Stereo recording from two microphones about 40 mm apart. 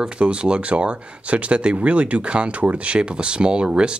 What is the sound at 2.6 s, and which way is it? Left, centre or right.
Speech, right.